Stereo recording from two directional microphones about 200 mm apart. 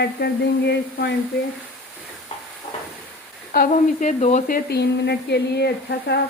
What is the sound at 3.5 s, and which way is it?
Speech, 45° left (ahead or behind).